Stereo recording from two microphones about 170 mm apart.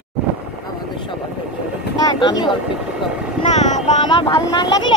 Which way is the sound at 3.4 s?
45° left (ahead or behind).